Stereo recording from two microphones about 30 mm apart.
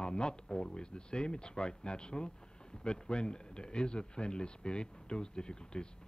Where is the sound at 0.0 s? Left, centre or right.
Left.